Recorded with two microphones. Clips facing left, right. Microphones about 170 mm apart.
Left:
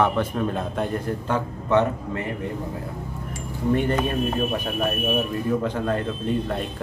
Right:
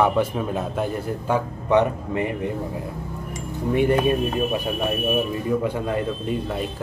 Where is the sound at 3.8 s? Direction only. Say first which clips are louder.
Right 8 dB; 10° right (ahead or behind).